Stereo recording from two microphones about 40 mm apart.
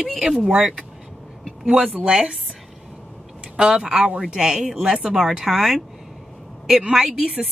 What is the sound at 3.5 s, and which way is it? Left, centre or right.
Speech, right.